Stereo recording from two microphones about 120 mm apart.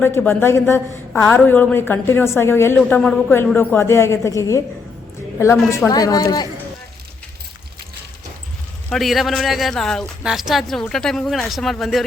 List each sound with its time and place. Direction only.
0.0 s a woman's voice: 20° left (ahead or behind)
2.7 s a man's voice: 5° left (ahead or behind); by 4.6 s 25° left (ahead or behind)
5.9 s speech: 30° left (ahead or behind)
8.9 s speech: centre (ahead or behind)